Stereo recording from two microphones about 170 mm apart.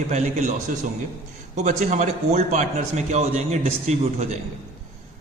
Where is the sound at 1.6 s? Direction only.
45° right (ahead or behind).